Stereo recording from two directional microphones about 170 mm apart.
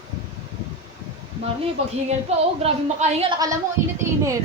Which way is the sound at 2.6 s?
40° right (ahead or behind).